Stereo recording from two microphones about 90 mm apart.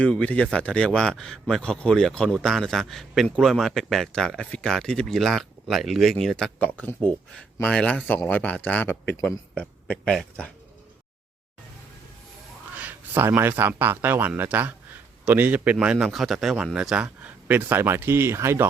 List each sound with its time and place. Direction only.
0.0 s speech: 15° left (ahead or behind)
6.7 s speech: 20° left (ahead or behind)
10.0 s speech: centre (ahead or behind)
12.8 s a man's voice: 20° right (ahead or behind)